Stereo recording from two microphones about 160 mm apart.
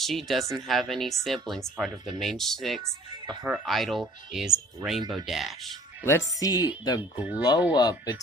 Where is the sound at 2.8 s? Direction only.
30° right (ahead or behind).